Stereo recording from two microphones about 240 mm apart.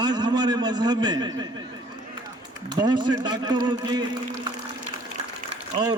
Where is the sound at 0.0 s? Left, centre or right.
Centre.